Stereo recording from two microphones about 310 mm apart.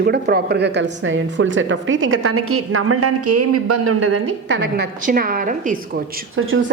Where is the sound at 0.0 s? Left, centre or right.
Right.